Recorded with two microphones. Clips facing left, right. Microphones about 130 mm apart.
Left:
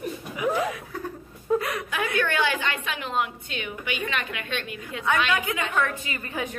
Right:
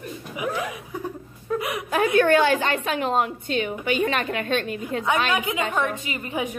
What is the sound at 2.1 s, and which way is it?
Speech, 45° right (ahead or behind).